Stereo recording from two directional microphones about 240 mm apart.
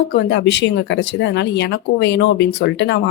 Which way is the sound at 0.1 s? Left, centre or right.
Left.